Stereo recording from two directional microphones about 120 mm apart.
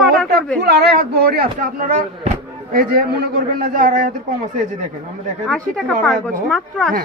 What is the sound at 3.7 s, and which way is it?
Speech, 90° right.